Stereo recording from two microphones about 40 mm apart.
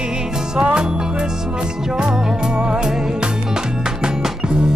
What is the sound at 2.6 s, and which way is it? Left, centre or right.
Music, centre.